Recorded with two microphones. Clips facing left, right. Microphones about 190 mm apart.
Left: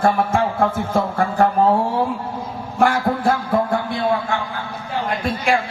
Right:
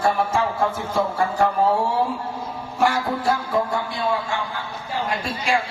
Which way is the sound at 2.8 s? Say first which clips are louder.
Left 4 dB; 55° left (ahead or behind).